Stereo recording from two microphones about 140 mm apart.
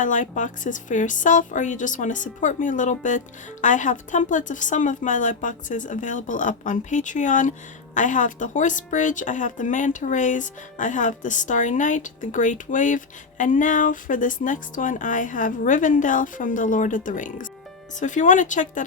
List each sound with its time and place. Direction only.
0.0 s speech: 65° left (ahead or behind)